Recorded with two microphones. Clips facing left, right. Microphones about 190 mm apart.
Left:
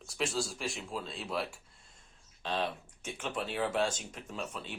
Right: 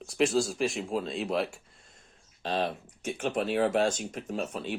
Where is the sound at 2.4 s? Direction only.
45° right (ahead or behind).